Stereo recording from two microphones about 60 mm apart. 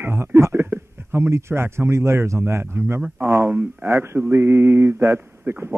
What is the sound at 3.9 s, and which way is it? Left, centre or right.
A man's voice, right.